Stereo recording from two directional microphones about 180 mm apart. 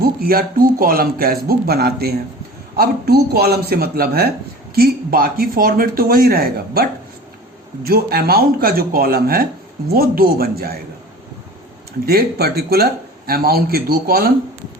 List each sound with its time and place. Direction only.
0.0 s speech: 55° right (ahead or behind)
7.9 s speech: 60° right (ahead or behind)
12.0 s speech: 60° right (ahead or behind)